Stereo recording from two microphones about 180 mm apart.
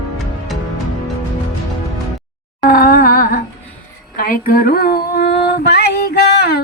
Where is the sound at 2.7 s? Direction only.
55° left (ahead or behind).